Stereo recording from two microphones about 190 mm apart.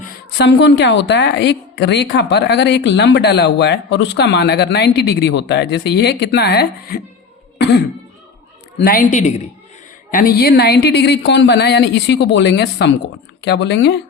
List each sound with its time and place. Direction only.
0.3 s a woman's voice: 65° left (ahead or behind)
8.8 s a woman's voice: 50° left (ahead or behind); by 14.0 s 65° left (ahead or behind)